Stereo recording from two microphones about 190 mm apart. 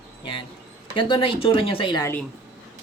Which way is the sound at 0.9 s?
25° left (ahead or behind).